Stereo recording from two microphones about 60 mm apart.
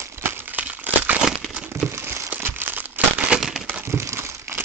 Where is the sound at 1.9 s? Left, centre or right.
Right.